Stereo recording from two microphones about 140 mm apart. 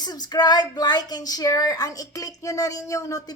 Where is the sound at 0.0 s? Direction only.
30° left (ahead or behind).